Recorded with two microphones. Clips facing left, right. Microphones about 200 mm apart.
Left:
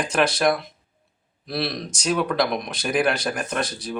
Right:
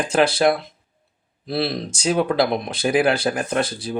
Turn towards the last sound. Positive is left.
turn(degrees=-30)  # may be behind; listen again after turning